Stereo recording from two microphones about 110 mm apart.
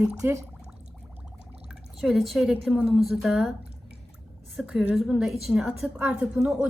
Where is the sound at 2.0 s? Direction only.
Centre (ahead or behind).